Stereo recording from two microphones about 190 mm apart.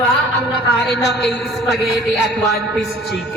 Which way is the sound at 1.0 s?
65° left (ahead or behind).